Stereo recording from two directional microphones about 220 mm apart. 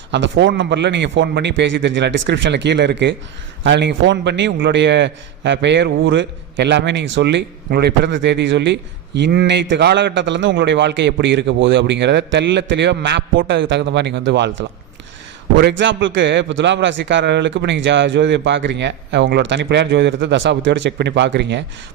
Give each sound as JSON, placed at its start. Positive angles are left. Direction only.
{"t": 0.1, "sound": "a man's voice", "side_deg": -55}
{"t": 15.5, "sound": "a man's voice", "side_deg": -50}